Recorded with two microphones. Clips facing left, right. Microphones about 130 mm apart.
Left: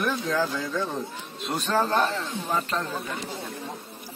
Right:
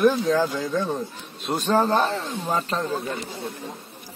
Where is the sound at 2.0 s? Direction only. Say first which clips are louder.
Right 2 dB; 40° right (ahead or behind).